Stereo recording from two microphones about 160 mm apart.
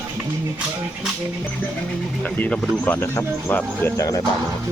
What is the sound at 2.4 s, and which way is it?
Speech, 5° left (ahead or behind).